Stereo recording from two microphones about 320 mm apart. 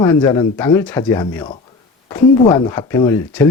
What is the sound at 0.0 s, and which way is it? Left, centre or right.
Speech, centre.